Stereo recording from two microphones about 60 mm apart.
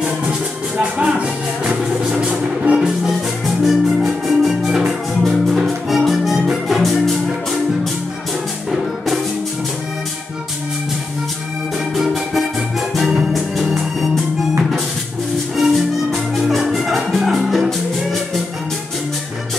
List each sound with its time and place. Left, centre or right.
0.7 s music: centre
3.4 s music: centre
11.9 s music: centre
15.5 s music: centre